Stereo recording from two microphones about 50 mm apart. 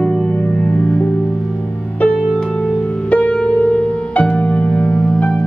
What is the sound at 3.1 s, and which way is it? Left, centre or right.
Music, left.